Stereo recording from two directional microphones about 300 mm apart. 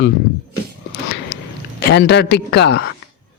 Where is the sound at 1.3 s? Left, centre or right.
Left.